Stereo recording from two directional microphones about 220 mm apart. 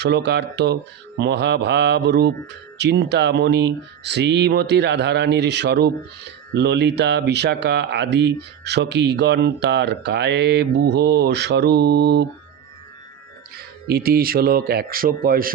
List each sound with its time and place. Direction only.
0.0 s speech: 50° right (ahead or behind)
13.8 s speech: 45° right (ahead or behind)